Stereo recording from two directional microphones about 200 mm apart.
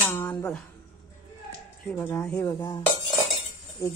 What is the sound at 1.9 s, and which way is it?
Speech, 10° left (ahead or behind).